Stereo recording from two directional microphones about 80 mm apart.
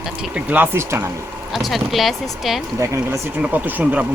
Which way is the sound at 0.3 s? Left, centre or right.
Right.